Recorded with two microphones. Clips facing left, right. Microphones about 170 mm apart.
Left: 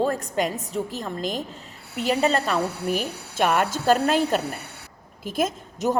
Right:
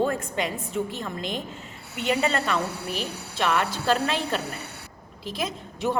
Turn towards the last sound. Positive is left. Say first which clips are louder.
# left 3 dB
turn(degrees=45)  # may be behind; listen again after turning